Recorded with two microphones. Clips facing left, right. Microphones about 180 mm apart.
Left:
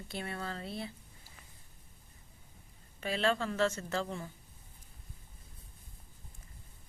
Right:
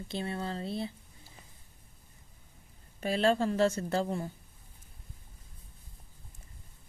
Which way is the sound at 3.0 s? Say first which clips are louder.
Right 5 dB; 40° right (ahead or behind).